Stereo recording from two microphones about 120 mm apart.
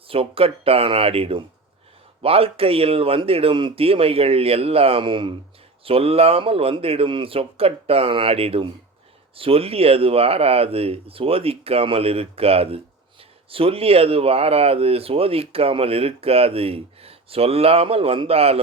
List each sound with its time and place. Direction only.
0.1 s speech: 50° right (ahead or behind)